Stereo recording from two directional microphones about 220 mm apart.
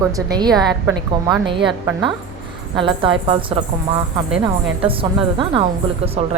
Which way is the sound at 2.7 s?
25° right (ahead or behind).